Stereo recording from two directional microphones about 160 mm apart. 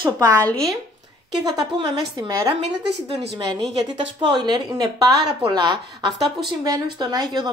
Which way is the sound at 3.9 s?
25° right (ahead or behind).